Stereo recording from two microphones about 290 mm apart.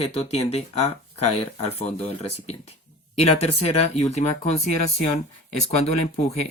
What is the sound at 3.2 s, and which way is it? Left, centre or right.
Speech, left.